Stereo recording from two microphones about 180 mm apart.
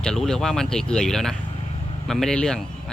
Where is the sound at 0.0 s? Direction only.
5° left (ahead or behind).